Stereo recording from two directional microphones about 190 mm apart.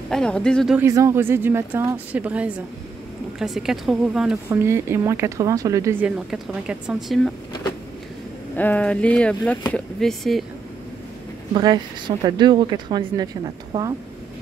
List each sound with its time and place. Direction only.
0.1 s speech: 5° left (ahead or behind)
0.7 s speech: 15° right (ahead or behind)
8.5 s speech: 10° left (ahead or behind)
11.5 s a woman's voice: 20° right (ahead or behind)